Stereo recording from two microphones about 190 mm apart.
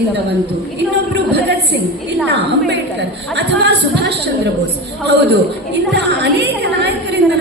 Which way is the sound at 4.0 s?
60° right (ahead or behind).